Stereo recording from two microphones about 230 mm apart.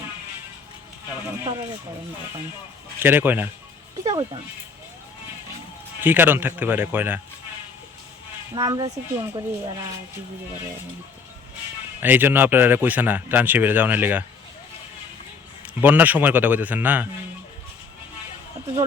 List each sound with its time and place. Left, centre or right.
3.0 s speech: centre
4.0 s speech: centre
6.0 s speech: centre
8.5 s speech: centre
11.9 s speech: centre
15.8 s speech: centre